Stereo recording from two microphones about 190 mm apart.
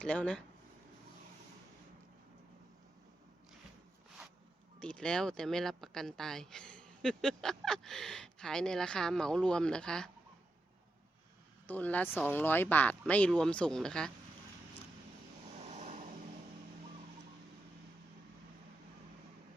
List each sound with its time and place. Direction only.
0.0 s speech: 5° left (ahead or behind)
4.8 s speech: 5° left (ahead or behind)
11.6 s speech: 10° left (ahead or behind)
15.7 s vehicle: 35° right (ahead or behind)